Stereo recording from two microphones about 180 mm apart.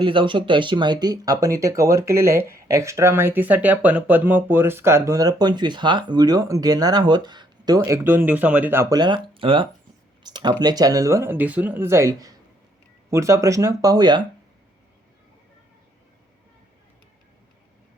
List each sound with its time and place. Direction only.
0.0 s speech: 30° right (ahead or behind)